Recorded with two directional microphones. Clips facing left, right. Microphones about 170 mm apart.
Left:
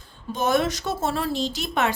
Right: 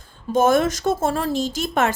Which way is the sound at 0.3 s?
45° right (ahead or behind).